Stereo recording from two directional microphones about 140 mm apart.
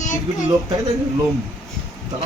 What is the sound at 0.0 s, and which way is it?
Speech, 65° left (ahead or behind).